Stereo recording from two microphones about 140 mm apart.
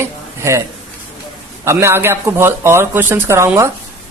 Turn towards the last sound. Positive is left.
turn(degrees=-20)  # may be behind; listen again after turning